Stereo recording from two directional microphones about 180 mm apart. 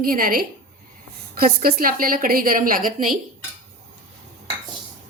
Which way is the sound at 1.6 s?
55° right (ahead or behind).